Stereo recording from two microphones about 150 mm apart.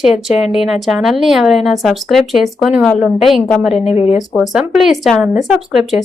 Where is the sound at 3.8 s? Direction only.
45° left (ahead or behind).